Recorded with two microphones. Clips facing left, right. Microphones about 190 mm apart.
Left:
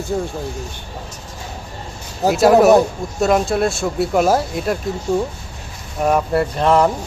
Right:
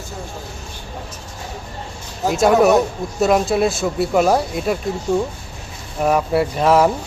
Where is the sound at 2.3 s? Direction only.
Centre (ahead or behind).